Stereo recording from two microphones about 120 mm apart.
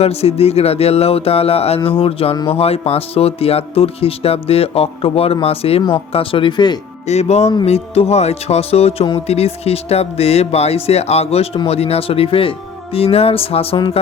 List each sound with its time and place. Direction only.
0.0 s speech: 55° left (ahead or behind); by 6.7 s 40° left (ahead or behind)
7.1 s speech: 65° left (ahead or behind)